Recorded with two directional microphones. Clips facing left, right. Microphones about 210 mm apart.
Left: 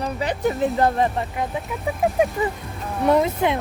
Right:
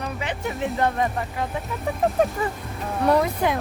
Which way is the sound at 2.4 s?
15° left (ahead or behind).